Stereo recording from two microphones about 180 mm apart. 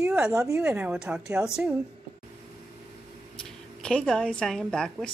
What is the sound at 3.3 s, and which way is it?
A woman's voice, 5° left (ahead or behind).